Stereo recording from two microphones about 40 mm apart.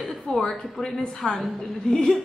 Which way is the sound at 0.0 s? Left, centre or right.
Centre.